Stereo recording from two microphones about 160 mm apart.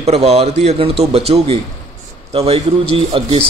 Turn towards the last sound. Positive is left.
turn(degrees=-35)  # may be behind; listen again after turning